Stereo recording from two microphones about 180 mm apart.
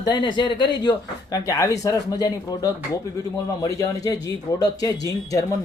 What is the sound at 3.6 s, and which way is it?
Speech, 20° left (ahead or behind).